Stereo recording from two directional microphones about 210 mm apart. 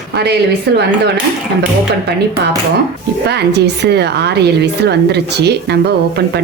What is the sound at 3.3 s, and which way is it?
A woman's voice, 50° right (ahead or behind).